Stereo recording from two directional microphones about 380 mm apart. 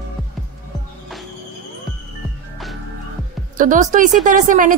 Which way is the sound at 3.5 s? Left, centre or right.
Right.